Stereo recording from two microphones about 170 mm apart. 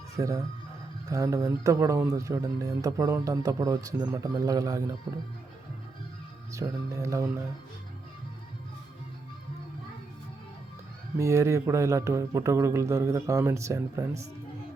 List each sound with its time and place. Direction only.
0.2 s speech: 20° right (ahead or behind)
6.5 s a man's voice: 15° right (ahead or behind)
11.2 s a man's voice: 15° right (ahead or behind)